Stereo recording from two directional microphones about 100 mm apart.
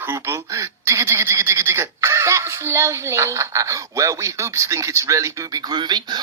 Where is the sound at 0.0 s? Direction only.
25° right (ahead or behind).